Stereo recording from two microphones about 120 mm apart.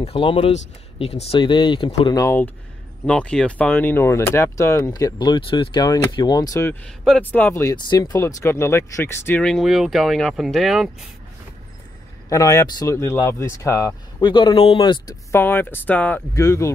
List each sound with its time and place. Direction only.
0.0 s speech: 50° left (ahead or behind)
2.0 s speech: 30° left (ahead or behind)
3.1 s speech: 10° left (ahead or behind); by 6.7 s 30° left (ahead or behind)
7.2 s speech: 15° left (ahead or behind)
7.7 s speech: 35° left (ahead or behind)
9.4 s speech: 5° left (ahead or behind)
12.3 s speech: 25° left (ahead or behind)
14.3 s speech: 45° left (ahead or behind)
15.3 s speech: 15° left (ahead or behind)
16.3 s speech: 25° left (ahead or behind)